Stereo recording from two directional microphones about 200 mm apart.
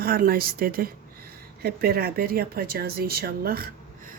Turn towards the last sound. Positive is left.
turn(degrees=-50)  # may be behind; listen again after turning